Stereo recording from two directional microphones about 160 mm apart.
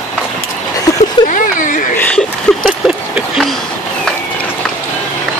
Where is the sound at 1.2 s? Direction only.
30° left (ahead or behind).